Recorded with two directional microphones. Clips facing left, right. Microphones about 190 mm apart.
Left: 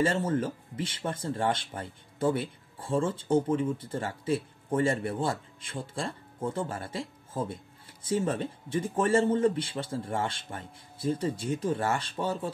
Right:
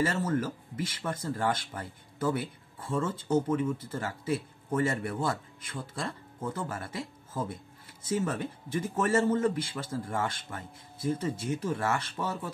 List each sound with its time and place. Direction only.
0.0 s speech: 30° left (ahead or behind)